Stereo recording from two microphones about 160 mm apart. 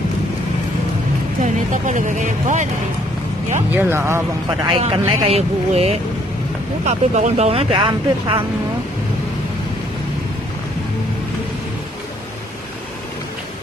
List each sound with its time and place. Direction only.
1.4 s speech: 50° right (ahead or behind)
3.7 s speech: 15° right (ahead or behind)
4.6 s speech: 40° right (ahead or behind)